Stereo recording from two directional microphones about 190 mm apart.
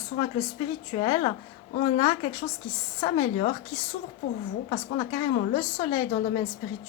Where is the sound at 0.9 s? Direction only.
25° left (ahead or behind).